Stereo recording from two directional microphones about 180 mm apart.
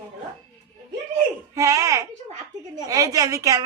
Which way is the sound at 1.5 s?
15° right (ahead or behind).